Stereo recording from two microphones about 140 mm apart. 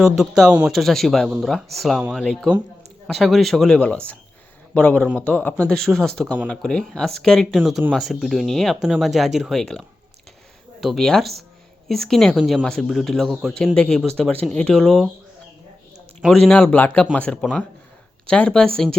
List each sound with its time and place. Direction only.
0.0 s speech: centre (ahead or behind)
16.5 s speech: 10° left (ahead or behind)